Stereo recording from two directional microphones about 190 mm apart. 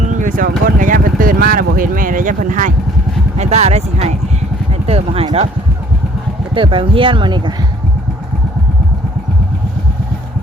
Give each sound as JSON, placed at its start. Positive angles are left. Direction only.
{"t": 0.0, "sound": "speech", "side_deg": -40}
{"t": 6.5, "sound": "speech", "side_deg": -25}